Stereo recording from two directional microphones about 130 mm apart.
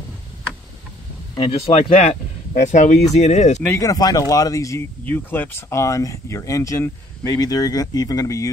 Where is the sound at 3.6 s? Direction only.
25° left (ahead or behind).